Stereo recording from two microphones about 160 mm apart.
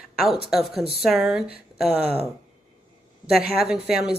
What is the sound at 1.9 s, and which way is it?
Speech, 40° right (ahead or behind).